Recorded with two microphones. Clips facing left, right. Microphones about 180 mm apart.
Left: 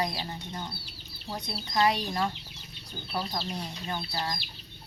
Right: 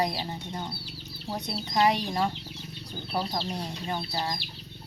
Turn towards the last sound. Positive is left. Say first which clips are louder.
# right 2 dB
turn(degrees=-20)  # may be behind; listen again after turning